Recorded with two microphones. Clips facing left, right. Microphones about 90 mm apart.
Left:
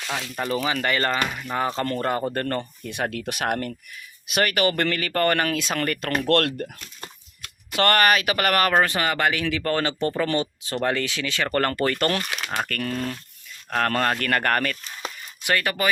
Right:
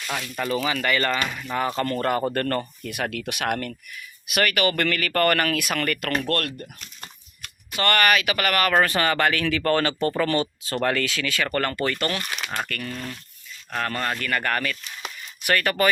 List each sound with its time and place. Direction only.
0.1 s speech: 25° left (ahead or behind)
2.8 s speech: 30° left (ahead or behind)
6.2 s speech: 70° left (ahead or behind)
7.9 s speech: 35° left (ahead or behind)
8.7 s speech: 20° left (ahead or behind)
11.6 s speech: 40° left (ahead or behind)
15.4 s speech: 20° left (ahead or behind)